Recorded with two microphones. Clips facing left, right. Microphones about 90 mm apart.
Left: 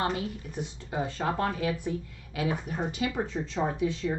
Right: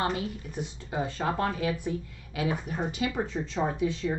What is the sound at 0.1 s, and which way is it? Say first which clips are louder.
Speech: even; 15° right (ahead or behind).